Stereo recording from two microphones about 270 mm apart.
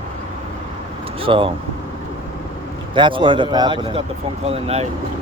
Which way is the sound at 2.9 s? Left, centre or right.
Centre.